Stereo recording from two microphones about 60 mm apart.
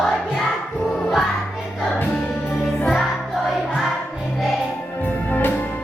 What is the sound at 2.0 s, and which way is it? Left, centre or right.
Music, left.